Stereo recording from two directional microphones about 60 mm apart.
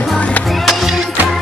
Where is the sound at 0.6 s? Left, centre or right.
Centre.